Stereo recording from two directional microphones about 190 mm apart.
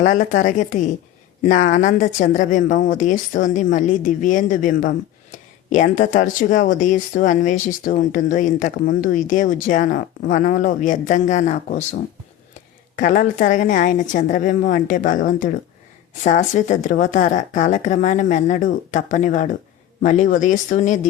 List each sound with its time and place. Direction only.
0.0 s speech: 40° left (ahead or behind)